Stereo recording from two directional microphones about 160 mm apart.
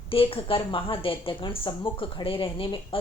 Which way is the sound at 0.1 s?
35° left (ahead or behind).